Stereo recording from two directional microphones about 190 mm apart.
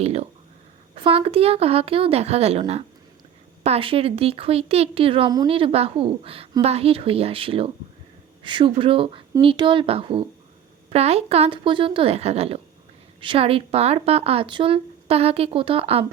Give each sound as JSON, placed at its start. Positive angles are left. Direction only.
{"t": 0.0, "sound": "speech", "side_deg": -35}